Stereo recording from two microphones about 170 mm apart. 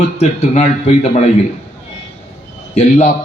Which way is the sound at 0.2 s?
40° left (ahead or behind).